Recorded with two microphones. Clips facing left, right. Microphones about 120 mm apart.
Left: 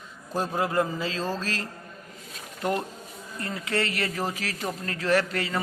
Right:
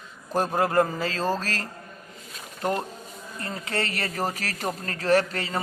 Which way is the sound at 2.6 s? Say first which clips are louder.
Right 1 dB; 35° right (ahead or behind).